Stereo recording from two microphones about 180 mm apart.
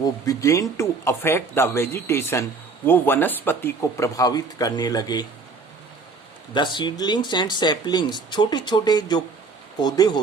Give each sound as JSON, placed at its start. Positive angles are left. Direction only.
{"t": 0.0, "sound": "speech", "side_deg": 20}
{"t": 6.7, "sound": "speech", "side_deg": 25}